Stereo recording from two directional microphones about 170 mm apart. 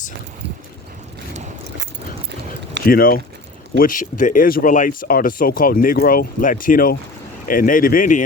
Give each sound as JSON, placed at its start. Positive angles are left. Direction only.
{"t": 2.8, "sound": "speech", "side_deg": 60}